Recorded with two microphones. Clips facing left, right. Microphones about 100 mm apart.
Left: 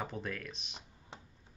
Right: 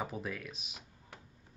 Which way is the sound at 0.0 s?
5° right (ahead or behind).